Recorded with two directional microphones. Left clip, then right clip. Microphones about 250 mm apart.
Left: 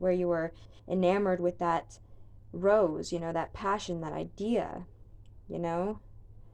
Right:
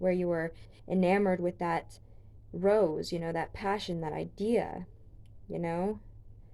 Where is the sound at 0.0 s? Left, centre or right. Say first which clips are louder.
Left 1 dB; centre.